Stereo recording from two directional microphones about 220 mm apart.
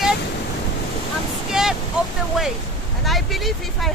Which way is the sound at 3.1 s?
Centre (ahead or behind).